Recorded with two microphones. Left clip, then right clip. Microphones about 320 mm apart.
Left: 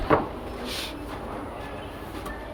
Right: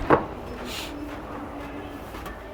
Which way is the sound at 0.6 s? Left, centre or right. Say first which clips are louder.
Left 2 dB; centre.